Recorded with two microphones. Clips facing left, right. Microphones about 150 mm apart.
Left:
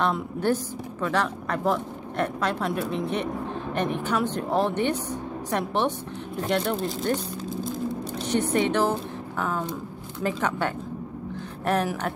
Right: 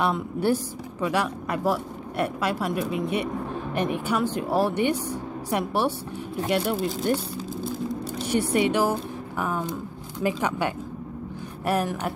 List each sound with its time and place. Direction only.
0.0 s speech: 10° right (ahead or behind)
8.3 s speech: 10° right (ahead or behind)